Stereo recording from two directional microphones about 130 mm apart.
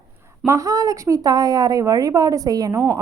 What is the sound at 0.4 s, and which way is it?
Speech, 25° right (ahead or behind).